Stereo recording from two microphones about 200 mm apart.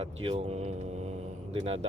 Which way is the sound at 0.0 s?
30° right (ahead or behind).